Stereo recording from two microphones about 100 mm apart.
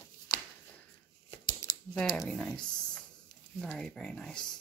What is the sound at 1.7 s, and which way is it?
Typing, 40° left (ahead or behind).